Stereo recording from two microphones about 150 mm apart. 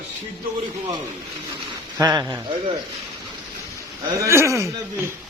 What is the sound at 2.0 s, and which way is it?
Speech, 30° right (ahead or behind).